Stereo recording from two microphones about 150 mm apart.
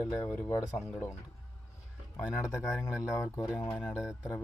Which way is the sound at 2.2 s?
20° left (ahead or behind).